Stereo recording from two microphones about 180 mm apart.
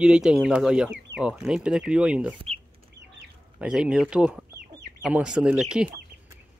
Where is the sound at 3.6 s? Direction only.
5° right (ahead or behind).